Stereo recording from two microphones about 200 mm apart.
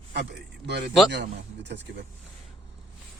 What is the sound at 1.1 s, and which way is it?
Speech, 60° right (ahead or behind).